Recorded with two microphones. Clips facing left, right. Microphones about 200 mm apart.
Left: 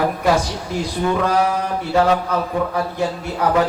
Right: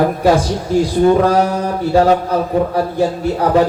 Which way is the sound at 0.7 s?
35° right (ahead or behind).